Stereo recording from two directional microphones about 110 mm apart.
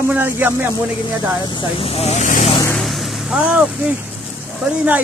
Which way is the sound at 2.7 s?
Centre (ahead or behind).